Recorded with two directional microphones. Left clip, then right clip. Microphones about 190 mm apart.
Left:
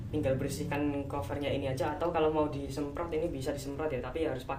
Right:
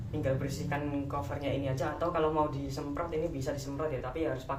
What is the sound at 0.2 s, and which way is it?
Speech, 50° left (ahead or behind).